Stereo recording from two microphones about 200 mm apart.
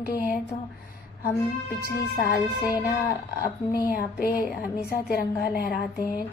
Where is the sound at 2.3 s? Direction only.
45° left (ahead or behind).